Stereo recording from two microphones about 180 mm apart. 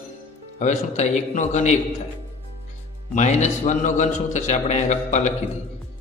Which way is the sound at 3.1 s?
40° left (ahead or behind).